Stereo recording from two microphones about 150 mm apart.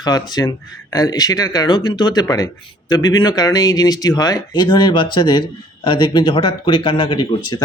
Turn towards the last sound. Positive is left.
turn(degrees=30)  # may be behind; listen again after turning